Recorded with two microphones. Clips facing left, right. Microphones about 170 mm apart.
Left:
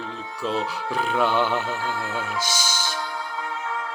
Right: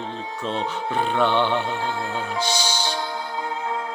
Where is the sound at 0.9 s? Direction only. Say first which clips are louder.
Right 1 dB; 5° left (ahead or behind).